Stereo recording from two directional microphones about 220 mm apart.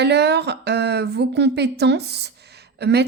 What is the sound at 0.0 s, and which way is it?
A woman's voice, 50° right (ahead or behind).